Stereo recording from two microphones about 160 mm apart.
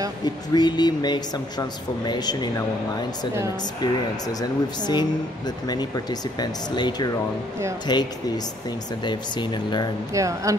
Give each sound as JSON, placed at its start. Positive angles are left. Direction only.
{"t": 0.2, "sound": "speech", "side_deg": 25}
{"t": 3.8, "sound": "speech", "side_deg": 25}
{"t": 10.1, "sound": "speech", "side_deg": -20}